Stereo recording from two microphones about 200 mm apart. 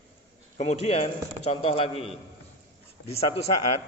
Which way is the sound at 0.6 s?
30° left (ahead or behind).